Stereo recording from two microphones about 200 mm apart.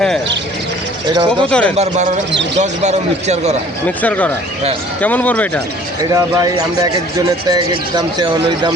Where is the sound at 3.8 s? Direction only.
10° left (ahead or behind).